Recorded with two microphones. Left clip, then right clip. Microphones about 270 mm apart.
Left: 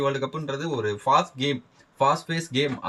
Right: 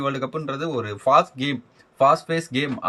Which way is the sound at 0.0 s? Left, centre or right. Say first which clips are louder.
Even; centre.